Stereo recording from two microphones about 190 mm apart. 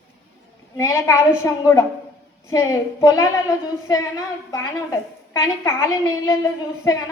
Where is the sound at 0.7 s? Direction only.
15° left (ahead or behind).